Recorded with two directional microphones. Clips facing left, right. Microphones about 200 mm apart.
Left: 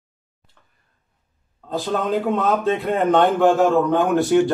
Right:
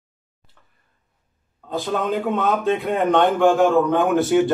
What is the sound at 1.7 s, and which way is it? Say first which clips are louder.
A man's voice: left 1 dB; centre (ahead or behind).